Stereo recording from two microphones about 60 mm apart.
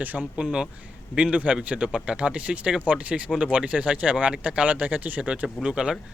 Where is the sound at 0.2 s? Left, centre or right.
Centre.